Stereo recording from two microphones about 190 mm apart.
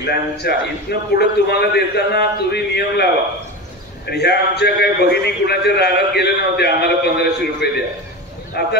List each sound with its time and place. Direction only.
0.0 s a man's voice: 60° left (ahead or behind)